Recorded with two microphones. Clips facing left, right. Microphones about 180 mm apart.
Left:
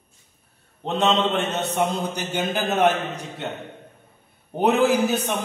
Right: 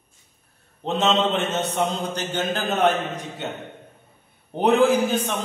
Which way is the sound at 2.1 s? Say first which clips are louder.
Even; 10° left (ahead or behind).